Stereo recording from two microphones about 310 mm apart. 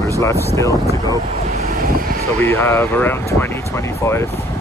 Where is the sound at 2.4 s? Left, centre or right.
Centre.